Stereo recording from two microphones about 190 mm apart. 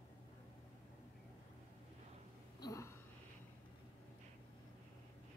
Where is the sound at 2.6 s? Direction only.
15° left (ahead or behind).